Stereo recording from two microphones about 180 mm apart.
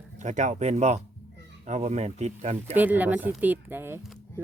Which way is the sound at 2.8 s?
10° right (ahead or behind).